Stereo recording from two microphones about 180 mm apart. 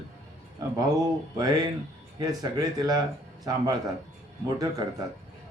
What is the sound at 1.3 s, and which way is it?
Speech, 20° right (ahead or behind).